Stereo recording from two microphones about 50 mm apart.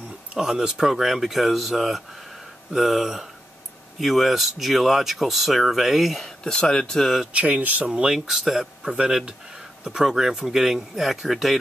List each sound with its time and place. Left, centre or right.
0.3 s speech: centre
6.4 s speech: centre
7.0 s speech: centre
7.3 s speech: right
7.9 s speech: centre